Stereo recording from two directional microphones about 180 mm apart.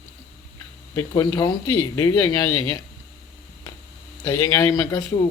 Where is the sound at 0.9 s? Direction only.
20° left (ahead or behind).